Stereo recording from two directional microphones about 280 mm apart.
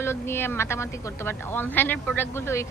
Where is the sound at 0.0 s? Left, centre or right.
Centre.